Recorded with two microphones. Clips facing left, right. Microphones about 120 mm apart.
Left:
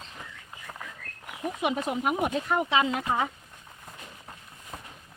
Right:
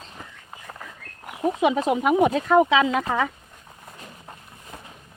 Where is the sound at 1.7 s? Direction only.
90° right.